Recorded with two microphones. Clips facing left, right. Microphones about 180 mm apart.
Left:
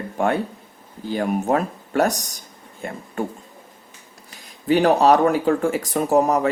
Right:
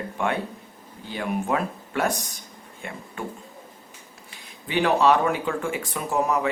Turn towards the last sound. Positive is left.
turn(degrees=40)  # may be behind; listen again after turning